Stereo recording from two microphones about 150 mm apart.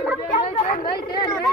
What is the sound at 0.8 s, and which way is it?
Chatter, 30° left (ahead or behind).